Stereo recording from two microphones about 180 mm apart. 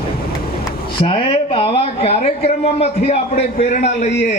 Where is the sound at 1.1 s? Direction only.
30° left (ahead or behind).